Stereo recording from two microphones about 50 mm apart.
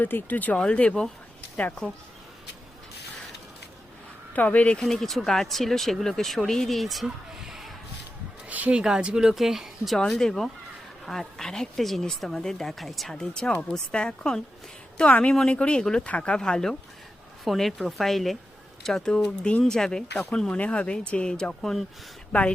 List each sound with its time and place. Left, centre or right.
0.0 s speech: left
0.5 s speech: left
4.4 s speech: left
4.8 s speech: centre
8.4 s a sound: right
8.7 s speech: centre
10.0 s speech: centre
13.1 s speech: centre
15.1 s speech: left
17.4 s speech: centre
19.1 s speech: centre
20.6 s speech: left; by 21.8 s centre
22.3 s speech: left